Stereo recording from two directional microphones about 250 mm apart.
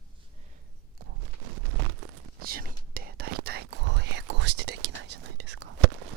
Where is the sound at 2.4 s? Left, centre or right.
Right.